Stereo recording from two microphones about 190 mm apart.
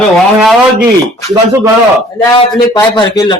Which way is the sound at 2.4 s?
20° left (ahead or behind).